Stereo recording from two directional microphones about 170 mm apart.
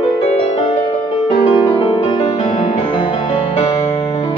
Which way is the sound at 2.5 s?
45° left (ahead or behind).